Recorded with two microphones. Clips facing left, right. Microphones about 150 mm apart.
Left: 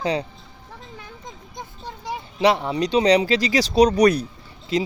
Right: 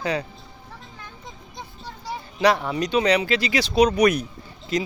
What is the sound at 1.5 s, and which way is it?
Speech, 15° left (ahead or behind).